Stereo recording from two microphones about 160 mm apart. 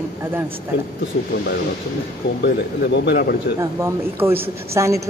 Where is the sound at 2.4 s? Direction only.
90° left.